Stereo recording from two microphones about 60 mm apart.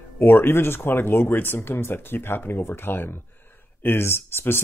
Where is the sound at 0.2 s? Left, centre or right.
Left.